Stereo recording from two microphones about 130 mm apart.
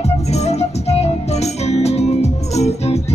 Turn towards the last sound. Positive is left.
turn(degrees=55)  # may be behind; listen again after turning